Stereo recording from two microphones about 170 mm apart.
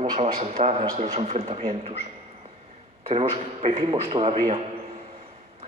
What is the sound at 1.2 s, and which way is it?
Speech, 40° right (ahead or behind).